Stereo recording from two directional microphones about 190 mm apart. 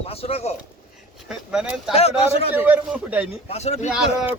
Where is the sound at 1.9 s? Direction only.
30° left (ahead or behind).